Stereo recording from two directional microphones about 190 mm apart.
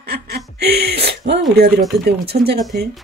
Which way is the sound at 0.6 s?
55° right (ahead or behind).